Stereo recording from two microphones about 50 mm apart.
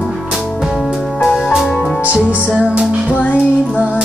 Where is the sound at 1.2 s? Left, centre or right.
Centre.